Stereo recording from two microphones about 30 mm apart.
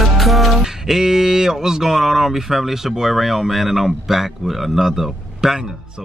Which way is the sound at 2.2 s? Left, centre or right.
Centre.